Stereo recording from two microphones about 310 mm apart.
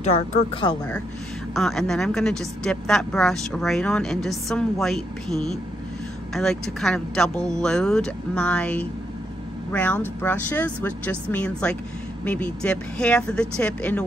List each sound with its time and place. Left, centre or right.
0.0 s speech: left
1.5 s a woman's voice: centre